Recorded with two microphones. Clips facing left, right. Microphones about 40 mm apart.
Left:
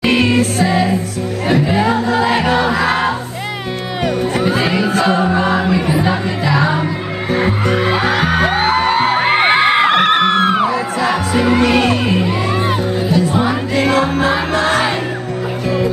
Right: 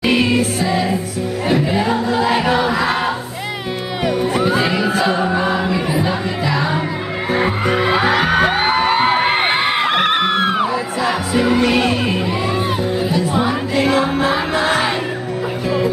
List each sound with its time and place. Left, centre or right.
0.0 s music: centre
1.5 s music: centre
4.0 s music: centre
7.3 s music: centre
9.4 s crowd: left
9.8 s a sound: centre
10.7 s music: centre